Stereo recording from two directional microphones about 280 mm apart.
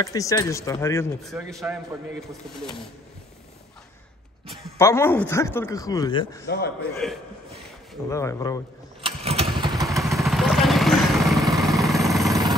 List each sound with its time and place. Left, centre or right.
0.0 s speech: centre
1.3 s a man's voice: centre
4.7 s speech: centre
6.4 s a man's voice: left
8.1 s speech: centre
9.0 s motorcycle: right
10.1 s vehicle: centre